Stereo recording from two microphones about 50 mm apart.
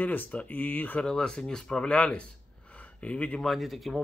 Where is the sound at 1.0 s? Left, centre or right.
Centre.